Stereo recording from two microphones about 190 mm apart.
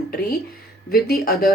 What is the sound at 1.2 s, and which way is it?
Speech, 50° left (ahead or behind).